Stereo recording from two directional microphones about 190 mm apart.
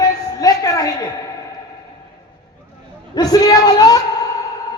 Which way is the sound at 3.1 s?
20° left (ahead or behind).